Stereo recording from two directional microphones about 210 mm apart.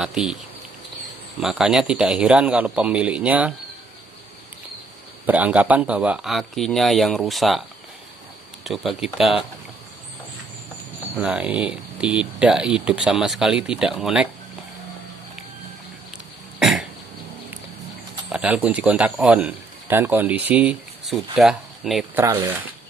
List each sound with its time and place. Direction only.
0.0 s speech: 5° right (ahead or behind)
1.4 s speech: 5° right (ahead or behind)
5.2 s speech: 5° right (ahead or behind)
8.6 s speech: centre (ahead or behind)
11.1 s speech: 5° right (ahead or behind)
16.5 s cough: centre (ahead or behind)
18.3 s speech: 5° right (ahead or behind)
22.2 s speech: 15° right (ahead or behind)